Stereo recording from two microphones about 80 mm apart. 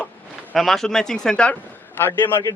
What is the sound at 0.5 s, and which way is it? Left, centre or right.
Speech, centre.